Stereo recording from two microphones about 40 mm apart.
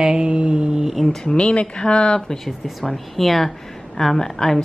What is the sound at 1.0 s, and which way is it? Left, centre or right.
Speech, centre.